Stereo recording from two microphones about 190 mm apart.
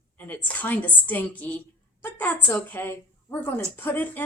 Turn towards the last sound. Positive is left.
turn(degrees=10)  # may be behind; listen again after turning